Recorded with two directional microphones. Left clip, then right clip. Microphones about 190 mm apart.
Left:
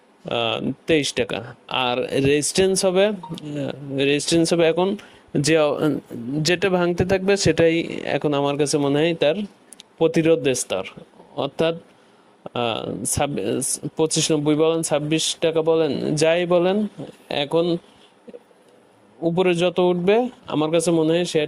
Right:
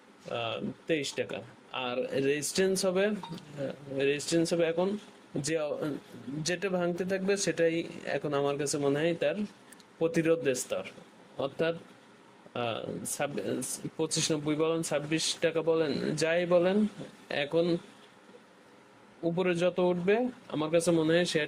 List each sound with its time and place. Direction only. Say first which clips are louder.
0.3 s speech: left 12 dB; 45° left (ahead or behind)
19.2 s speech: left 9 dB; 35° left (ahead or behind)